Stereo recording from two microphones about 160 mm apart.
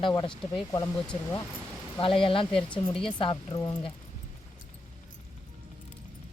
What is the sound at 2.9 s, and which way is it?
Speech, 5° left (ahead or behind).